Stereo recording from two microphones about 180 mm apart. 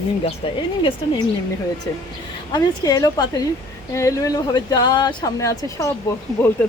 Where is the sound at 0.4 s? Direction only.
30° left (ahead or behind).